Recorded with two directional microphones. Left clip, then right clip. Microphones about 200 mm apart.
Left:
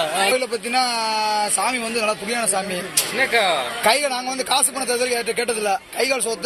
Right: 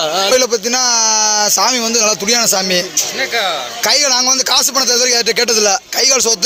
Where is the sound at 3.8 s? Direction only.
55° right (ahead or behind).